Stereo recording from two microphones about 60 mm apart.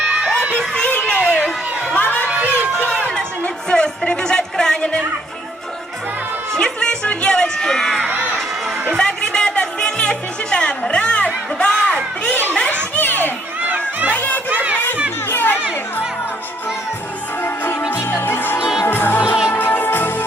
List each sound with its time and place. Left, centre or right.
0.3 s crowd: right
0.9 s a sound: left
2.0 s crowd: left
3.7 s music: centre
6.5 s a sound: centre
8.0 s crowd: right
9.0 s music: centre
12.3 s a sound: left
13.0 s children playing: left
13.7 s music: right
14.1 s music: left
14.5 s crowd: right
15.3 s chatter: left
17.4 s music: left